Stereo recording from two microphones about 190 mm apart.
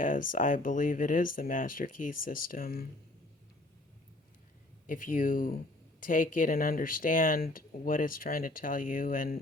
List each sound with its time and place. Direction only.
0.0 s speech: 45° left (ahead or behind)
4.9 s speech: 45° left (ahead or behind)